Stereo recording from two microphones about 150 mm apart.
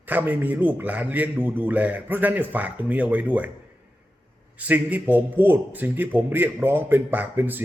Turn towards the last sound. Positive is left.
turn(degrees=-10)  # may be behind; listen again after turning